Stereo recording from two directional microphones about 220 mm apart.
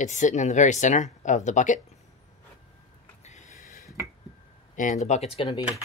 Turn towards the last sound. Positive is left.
turn(degrees=25)  # may be behind; listen again after turning